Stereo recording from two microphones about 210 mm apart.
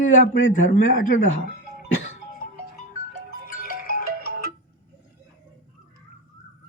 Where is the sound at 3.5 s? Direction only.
45° left (ahead or behind).